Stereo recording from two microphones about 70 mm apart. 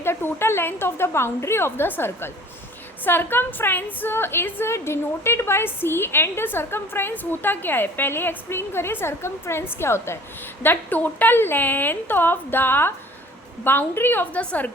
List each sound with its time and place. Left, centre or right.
0.0 s a woman's voice: left
10.6 s a woman's voice: left